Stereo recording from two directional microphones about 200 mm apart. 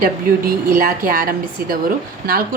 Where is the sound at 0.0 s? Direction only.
45° right (ahead or behind).